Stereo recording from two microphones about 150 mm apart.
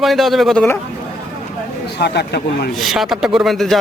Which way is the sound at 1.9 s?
90° left.